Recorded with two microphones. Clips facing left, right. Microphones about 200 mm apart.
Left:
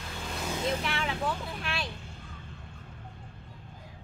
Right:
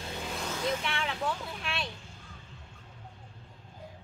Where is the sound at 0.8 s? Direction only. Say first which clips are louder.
Left 2 dB; centre (ahead or behind).